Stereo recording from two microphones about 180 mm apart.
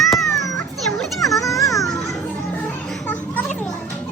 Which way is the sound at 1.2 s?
20° left (ahead or behind).